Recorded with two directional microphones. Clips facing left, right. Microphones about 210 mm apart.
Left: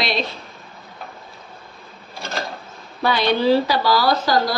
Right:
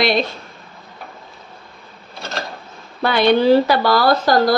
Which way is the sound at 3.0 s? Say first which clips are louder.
Right 4 dB; 55° right (ahead or behind).